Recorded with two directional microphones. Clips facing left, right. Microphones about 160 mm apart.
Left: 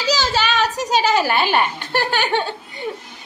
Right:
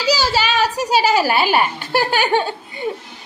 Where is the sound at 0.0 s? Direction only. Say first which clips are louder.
Right 2 dB; 10° right (ahead or behind).